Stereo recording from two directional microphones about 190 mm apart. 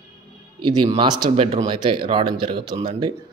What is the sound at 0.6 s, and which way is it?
Speech, 25° right (ahead or behind).